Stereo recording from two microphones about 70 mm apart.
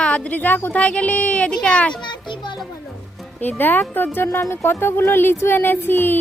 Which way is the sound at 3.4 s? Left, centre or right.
Left.